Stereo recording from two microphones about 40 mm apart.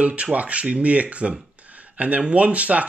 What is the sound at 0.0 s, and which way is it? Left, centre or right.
Speech, right.